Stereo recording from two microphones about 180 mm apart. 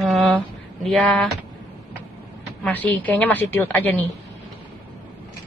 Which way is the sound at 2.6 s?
10° left (ahead or behind).